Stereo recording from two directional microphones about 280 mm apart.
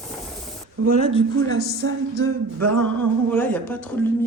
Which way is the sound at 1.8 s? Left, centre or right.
Right.